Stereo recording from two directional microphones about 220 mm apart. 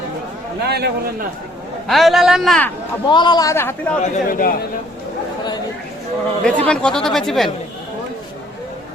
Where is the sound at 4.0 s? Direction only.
40° left (ahead or behind).